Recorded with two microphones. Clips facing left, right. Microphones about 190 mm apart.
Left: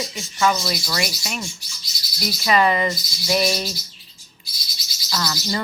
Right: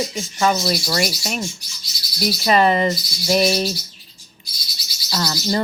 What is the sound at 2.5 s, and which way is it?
Speech, 40° right (ahead or behind).